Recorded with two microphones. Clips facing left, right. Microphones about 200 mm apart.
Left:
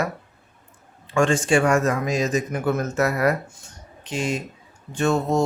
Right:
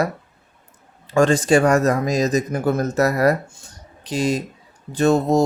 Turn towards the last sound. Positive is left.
turn(degrees=-35)  # may be behind; listen again after turning